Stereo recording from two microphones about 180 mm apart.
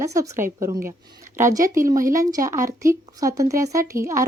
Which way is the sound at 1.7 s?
15° right (ahead or behind).